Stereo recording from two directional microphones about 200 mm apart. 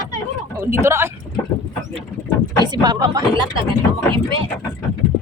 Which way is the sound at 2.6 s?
20° right (ahead or behind).